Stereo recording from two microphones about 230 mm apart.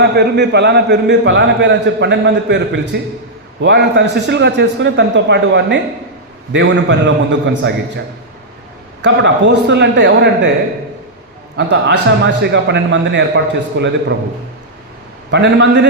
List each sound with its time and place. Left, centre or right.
0.0 s a man's voice: right
9.0 s a man's voice: right
11.5 s a man's voice: right
15.3 s a man's voice: right